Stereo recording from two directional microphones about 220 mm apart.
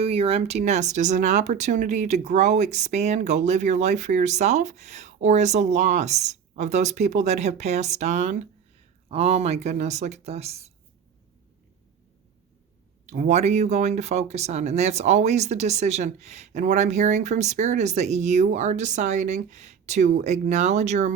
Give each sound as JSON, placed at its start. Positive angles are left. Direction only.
{"t": 0.0, "sound": "speech", "side_deg": -25}
{"t": 13.1, "sound": "speech", "side_deg": -30}